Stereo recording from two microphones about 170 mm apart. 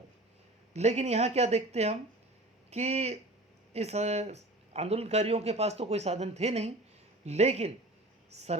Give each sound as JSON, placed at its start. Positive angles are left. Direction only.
{"t": 0.7, "sound": "speech", "side_deg": -40}